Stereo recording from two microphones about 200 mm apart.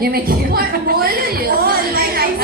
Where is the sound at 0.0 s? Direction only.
50° right (ahead or behind).